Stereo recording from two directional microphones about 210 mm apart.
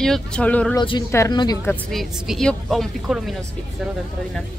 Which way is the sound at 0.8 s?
20° left (ahead or behind).